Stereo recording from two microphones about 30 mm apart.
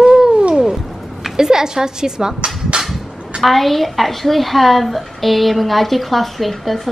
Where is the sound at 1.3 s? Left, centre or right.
Centre.